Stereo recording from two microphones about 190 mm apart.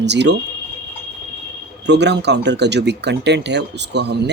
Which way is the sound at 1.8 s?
65° right (ahead or behind).